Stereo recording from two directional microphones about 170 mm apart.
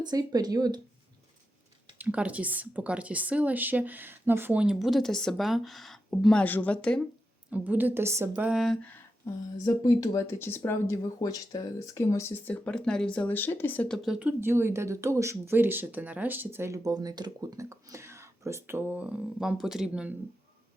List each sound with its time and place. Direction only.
0.0 s speech: 25° right (ahead or behind)
2.0 s speech: 10° right (ahead or behind)
7.5 s speech: 10° right (ahead or behind)
9.2 s speech: 20° left (ahead or behind); by 20.1 s 5° right (ahead or behind)